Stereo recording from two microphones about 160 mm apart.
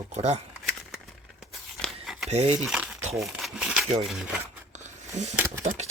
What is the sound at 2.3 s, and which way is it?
Speech, 45° right (ahead or behind).